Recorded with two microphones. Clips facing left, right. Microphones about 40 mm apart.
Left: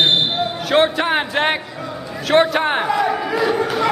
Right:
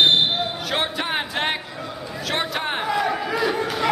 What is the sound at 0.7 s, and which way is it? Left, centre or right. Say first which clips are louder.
Speech: left 10 dB; centre.